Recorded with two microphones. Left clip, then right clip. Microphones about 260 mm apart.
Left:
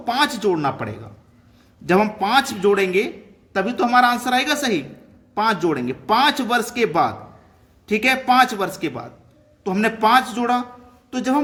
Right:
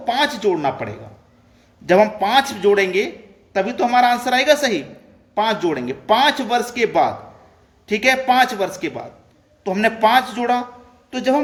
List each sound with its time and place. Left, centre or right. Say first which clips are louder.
0.0 s speech: right 1 dB; left